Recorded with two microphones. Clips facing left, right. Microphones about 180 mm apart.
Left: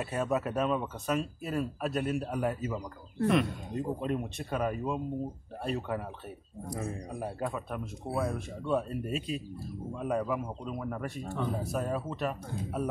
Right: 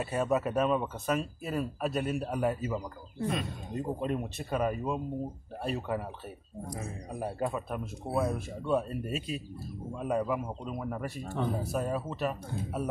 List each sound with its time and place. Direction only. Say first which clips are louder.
0.0 s speech: right 2 dB; centre (ahead or behind)
3.2 s speech: left 6 dB; 70° left (ahead or behind)
3.7 s speech: even; centre (ahead or behind)
7.2 s speech: right 4 dB; 5° right (ahead or behind)